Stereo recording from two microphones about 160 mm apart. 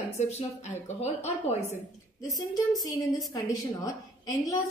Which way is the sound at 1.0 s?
40° left (ahead or behind).